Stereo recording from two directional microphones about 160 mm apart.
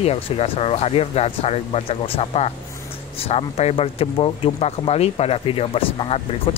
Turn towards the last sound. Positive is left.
turn(degrees=35)  # may be behind; listen again after turning